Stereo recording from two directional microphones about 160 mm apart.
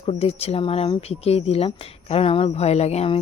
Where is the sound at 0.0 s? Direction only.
35° left (ahead or behind).